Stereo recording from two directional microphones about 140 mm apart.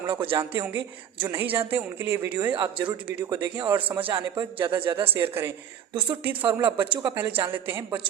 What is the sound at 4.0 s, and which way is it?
Speech, 40° right (ahead or behind).